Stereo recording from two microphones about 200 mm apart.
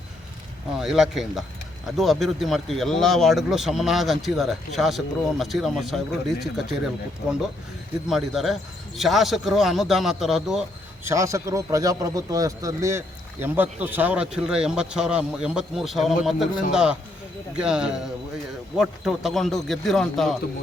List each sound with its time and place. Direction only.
0.8 s speech: centre (ahead or behind)
11.0 s a man's voice: 15° right (ahead or behind); by 20.3 s centre (ahead or behind)